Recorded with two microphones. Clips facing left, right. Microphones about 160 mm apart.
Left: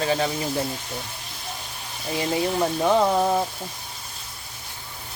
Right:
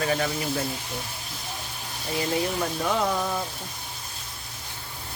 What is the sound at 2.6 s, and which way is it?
Speech, 30° left (ahead or behind).